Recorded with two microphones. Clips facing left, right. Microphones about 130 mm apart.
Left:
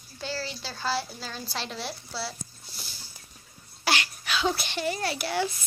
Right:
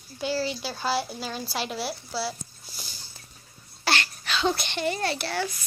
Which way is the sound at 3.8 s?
10° left (ahead or behind).